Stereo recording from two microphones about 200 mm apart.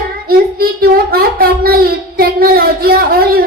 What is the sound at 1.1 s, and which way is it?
Child singing, 50° right (ahead or behind).